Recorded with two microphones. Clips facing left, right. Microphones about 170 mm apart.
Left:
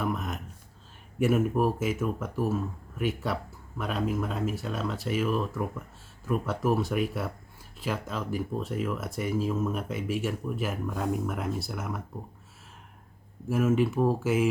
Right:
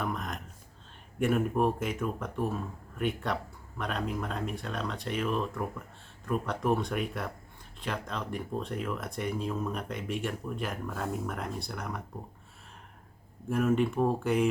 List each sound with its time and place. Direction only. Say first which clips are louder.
0.0 s a sound: left 3 dB; 5° left (ahead or behind)
1.2 s speech: left 2 dB; 5° left (ahead or behind)
13.5 s speech: left 2 dB; 5° left (ahead or behind)